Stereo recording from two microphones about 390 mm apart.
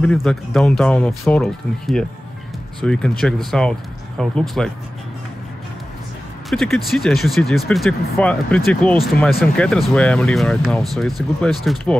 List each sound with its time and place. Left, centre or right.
0.0 s speech: centre
6.5 s speech: centre